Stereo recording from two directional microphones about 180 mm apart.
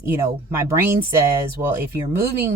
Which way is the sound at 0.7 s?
15° right (ahead or behind).